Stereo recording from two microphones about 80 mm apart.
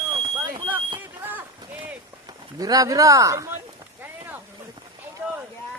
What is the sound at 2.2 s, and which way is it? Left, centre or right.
Speech, right.